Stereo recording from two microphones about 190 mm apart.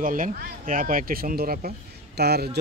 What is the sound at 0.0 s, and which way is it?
Speech, 45° right (ahead or behind).